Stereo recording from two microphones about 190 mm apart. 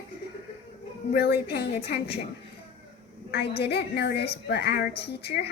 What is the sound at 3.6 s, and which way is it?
A woman's voice, 60° left (ahead or behind).